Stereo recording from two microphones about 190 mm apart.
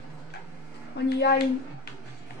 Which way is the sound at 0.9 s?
60° left (ahead or behind).